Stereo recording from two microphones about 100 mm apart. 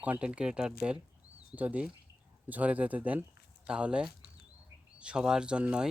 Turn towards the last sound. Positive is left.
turn(degrees=-10)  # may be behind; listen again after turning